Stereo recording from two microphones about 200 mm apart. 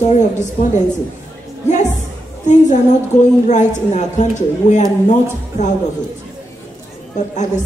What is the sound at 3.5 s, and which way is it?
A woman's voice, 35° left (ahead or behind).